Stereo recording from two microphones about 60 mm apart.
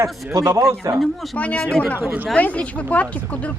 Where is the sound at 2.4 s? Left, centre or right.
Left.